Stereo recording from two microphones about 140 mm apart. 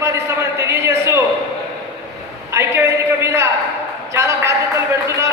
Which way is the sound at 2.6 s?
20° right (ahead or behind).